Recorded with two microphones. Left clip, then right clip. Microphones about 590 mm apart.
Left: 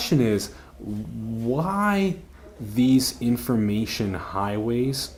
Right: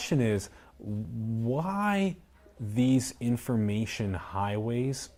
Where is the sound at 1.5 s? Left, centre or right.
Right.